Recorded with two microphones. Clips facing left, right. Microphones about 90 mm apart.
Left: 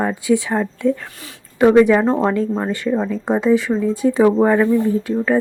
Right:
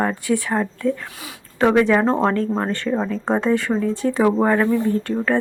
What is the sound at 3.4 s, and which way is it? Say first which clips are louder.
Speech: left 3 dB; 5° left (ahead or behind).